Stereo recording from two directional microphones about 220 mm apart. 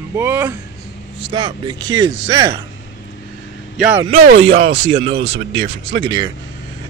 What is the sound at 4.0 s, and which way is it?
Speech, 30° right (ahead or behind).